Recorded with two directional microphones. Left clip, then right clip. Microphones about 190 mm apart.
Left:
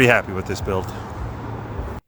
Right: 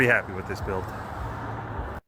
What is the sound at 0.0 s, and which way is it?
Speech, 15° left (ahead or behind).